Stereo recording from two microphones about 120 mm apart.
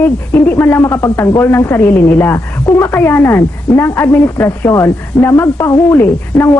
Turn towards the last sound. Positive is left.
turn(degrees=25)  # may be behind; listen again after turning